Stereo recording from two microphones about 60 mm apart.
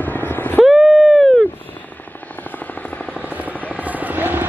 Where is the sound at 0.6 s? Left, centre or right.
Centre.